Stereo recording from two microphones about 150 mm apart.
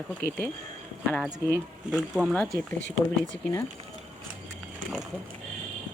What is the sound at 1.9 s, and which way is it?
Speech, 5° right (ahead or behind).